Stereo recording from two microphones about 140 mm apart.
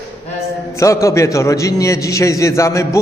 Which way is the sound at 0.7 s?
20° left (ahead or behind).